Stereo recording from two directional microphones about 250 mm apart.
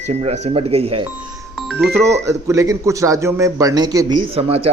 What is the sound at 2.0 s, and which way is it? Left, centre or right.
A man's voice, centre.